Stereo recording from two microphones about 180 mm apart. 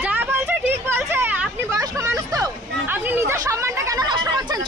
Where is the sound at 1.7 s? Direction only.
15° right (ahead or behind).